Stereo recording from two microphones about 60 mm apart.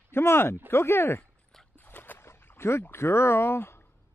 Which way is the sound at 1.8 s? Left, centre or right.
Left.